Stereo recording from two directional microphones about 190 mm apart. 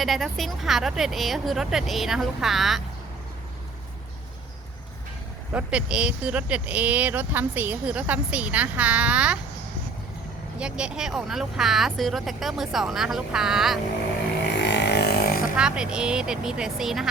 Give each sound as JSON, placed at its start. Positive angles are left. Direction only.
{"t": 0.0, "sound": "speech", "side_deg": 0}
{"t": 5.5, "sound": "speech", "side_deg": -5}
{"t": 10.6, "sound": "speech", "side_deg": -5}
{"t": 14.5, "sound": "a sound", "side_deg": 65}
{"t": 15.5, "sound": "speech", "side_deg": -5}